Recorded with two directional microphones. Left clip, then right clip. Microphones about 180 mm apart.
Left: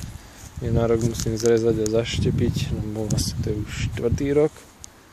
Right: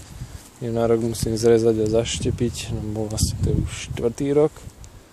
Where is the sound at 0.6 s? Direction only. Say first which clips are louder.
Right 2 dB; 5° right (ahead or behind).